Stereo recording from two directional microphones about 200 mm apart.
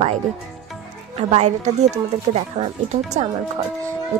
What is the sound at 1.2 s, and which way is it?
Speech, 35° right (ahead or behind).